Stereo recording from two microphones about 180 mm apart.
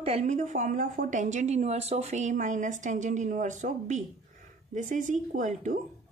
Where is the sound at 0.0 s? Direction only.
40° right (ahead or behind).